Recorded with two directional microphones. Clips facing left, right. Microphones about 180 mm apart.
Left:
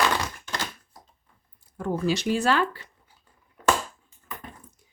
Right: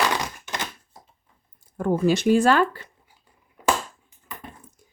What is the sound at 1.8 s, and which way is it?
Speech, 55° right (ahead or behind).